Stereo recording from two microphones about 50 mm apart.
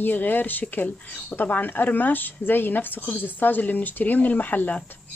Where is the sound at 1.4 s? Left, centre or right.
Left.